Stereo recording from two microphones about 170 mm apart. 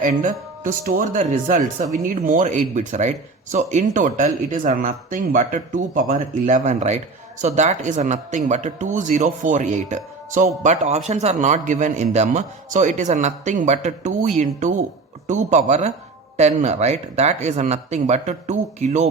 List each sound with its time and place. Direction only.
0.0 s a man's voice: 50° right (ahead or behind)